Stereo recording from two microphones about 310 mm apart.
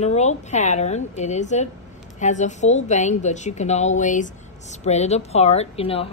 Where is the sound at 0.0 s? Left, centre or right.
Left.